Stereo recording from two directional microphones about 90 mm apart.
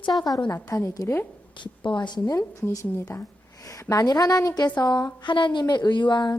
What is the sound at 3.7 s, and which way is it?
A woman's voice, 45° left (ahead or behind).